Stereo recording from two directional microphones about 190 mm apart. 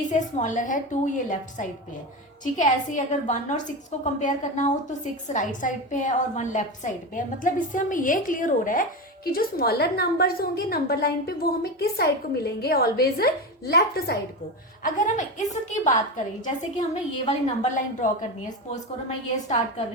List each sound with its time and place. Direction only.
0.1 s a woman's voice: 40° left (ahead or behind); by 14.2 s 55° left (ahead or behind)
14.8 s a woman's voice: 40° left (ahead or behind)